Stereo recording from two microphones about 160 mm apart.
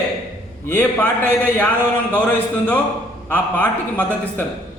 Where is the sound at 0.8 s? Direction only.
10° left (ahead or behind).